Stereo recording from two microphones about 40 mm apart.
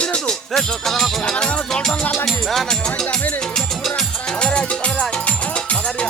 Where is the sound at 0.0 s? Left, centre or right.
Left.